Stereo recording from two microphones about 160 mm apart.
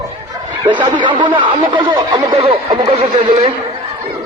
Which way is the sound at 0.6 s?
30° right (ahead or behind).